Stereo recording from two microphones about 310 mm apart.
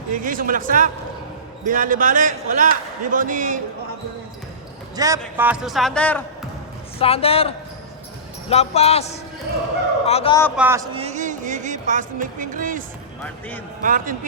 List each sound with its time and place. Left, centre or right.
0.1 s a man's voice: right
4.9 s speech: centre
7.0 s a man's voice: centre
10.6 s a man's voice: centre; by 12.8 s right
13.8 s a man's voice: right